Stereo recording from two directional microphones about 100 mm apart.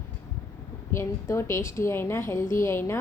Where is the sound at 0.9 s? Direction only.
25° left (ahead or behind).